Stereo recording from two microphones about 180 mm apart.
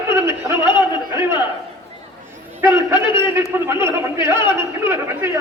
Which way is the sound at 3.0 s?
25° left (ahead or behind).